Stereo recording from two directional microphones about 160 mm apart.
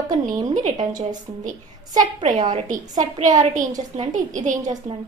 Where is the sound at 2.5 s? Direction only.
50° right (ahead or behind).